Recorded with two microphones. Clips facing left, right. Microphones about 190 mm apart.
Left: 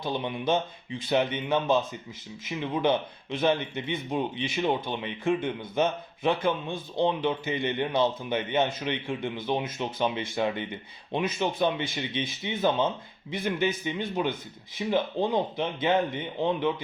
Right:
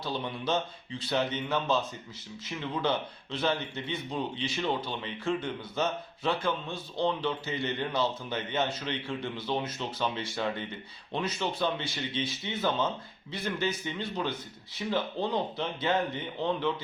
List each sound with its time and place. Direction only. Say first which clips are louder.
0.1 s a man's voice: left 4 dB; 20° left (ahead or behind)